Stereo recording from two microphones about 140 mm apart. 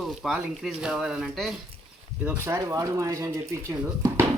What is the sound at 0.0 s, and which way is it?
Speech, centre (ahead or behind).